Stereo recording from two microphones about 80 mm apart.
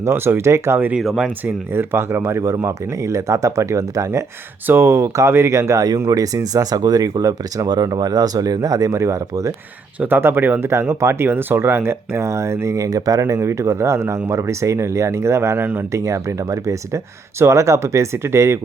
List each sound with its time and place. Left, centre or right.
0.0 s speech: right
0.9 s speech: centre
1.7 s speech: right
4.6 s speech: right
10.2 s speech: right
13.2 s speech: right